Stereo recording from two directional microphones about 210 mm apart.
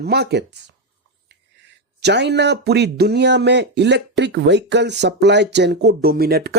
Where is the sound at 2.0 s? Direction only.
55° right (ahead or behind).